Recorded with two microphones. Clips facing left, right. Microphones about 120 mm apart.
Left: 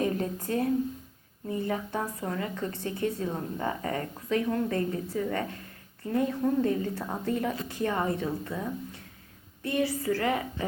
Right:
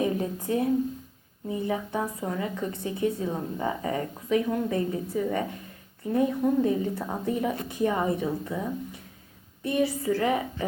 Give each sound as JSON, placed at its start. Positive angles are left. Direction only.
{"t": 0.0, "sound": "a woman's voice", "side_deg": -15}